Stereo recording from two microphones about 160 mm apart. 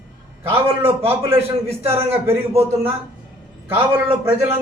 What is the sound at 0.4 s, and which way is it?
A man's voice, 15° right (ahead or behind).